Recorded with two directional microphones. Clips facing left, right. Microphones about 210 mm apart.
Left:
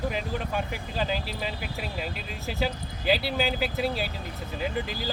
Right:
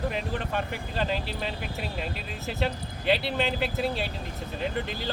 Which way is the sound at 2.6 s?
Centre (ahead or behind).